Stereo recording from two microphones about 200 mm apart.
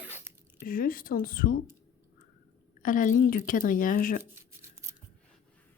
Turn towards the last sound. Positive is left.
turn(degrees=45)  # may be behind; listen again after turning